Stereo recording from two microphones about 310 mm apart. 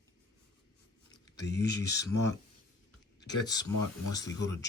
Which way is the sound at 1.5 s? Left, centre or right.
Left.